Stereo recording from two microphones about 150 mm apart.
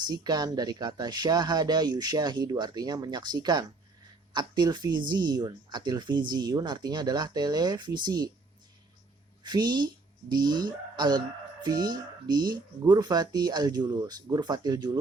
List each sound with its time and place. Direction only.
0.0 s speech: 30° right (ahead or behind)
9.4 s speech: 30° right (ahead or behind)